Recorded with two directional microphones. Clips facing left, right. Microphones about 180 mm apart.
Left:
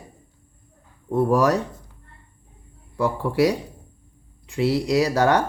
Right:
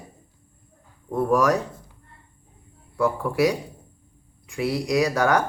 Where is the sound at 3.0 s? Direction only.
30° left (ahead or behind).